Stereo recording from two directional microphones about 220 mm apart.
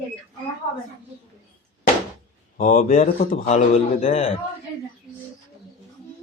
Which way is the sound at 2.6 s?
35° left (ahead or behind).